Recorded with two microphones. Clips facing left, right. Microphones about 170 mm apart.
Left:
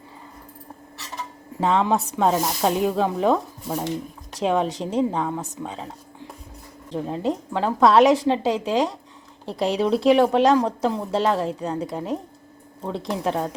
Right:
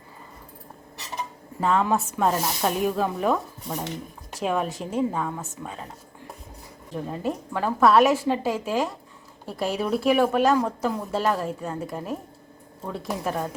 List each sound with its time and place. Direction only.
1.6 s speech: 20° left (ahead or behind)
3.7 s speech: 10° left (ahead or behind)
4.4 s speech: 25° left (ahead or behind)
6.9 s speech: 20° left (ahead or behind)